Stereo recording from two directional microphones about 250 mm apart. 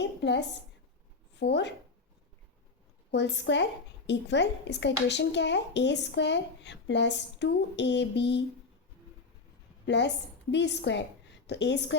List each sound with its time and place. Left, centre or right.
0.0 s a woman's voice: left
3.1 s a woman's voice: left
9.8 s a woman's voice: left